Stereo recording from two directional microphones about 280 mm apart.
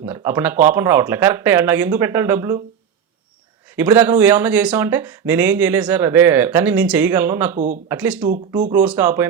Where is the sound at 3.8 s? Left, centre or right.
Centre.